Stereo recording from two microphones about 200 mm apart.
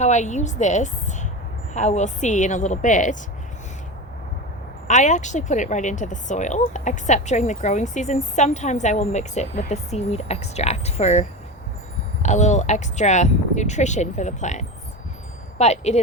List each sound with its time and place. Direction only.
0.0 s a woman's voice: 35° left (ahead or behind)
4.9 s speech: 35° left (ahead or behind)